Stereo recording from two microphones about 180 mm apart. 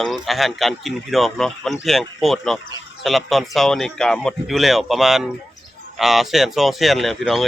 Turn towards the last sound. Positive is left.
turn(degrees=0)  # may be behind; listen again after turning